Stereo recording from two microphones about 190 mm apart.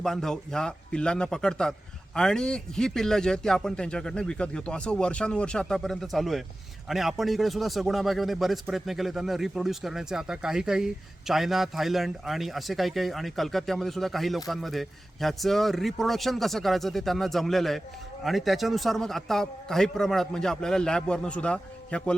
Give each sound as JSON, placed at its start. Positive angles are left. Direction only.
{"t": 0.0, "sound": "a man's voice", "side_deg": 0}